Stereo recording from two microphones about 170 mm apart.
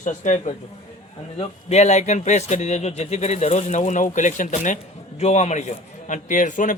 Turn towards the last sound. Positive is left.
turn(degrees=50)  # may be behind; listen again after turning